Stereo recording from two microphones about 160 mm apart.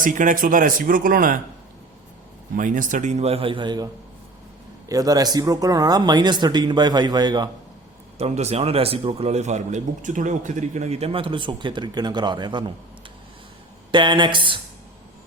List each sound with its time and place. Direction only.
0.0 s speech: 55° right (ahead or behind)
2.6 s a man's voice: 55° right (ahead or behind); by 3.8 s 30° right (ahead or behind)
4.9 s speech: 20° right (ahead or behind)
8.2 s a man's voice: 40° right (ahead or behind)
13.9 s speech: 30° right (ahead or behind)